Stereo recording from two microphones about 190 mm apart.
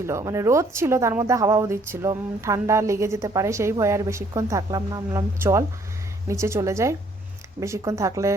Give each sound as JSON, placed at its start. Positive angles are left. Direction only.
{"t": 0.0, "sound": "speech", "side_deg": -15}